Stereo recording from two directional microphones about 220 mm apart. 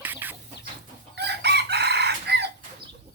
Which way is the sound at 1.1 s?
50° right (ahead or behind).